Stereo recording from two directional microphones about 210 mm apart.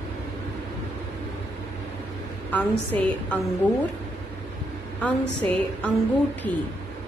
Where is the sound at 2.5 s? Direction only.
5° left (ahead or behind).